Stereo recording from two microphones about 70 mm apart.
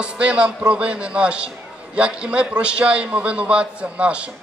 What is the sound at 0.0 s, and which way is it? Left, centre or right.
A man's voice, centre.